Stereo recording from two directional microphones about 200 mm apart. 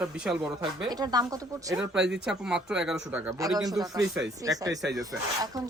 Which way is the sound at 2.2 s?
5° right (ahead or behind).